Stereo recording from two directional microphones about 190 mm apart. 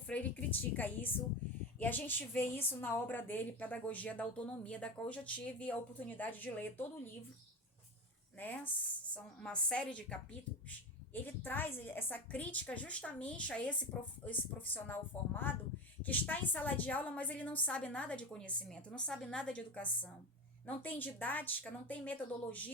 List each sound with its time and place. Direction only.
0.1 s a woman's voice: 5° left (ahead or behind)
8.4 s a woman's voice: 10° left (ahead or behind)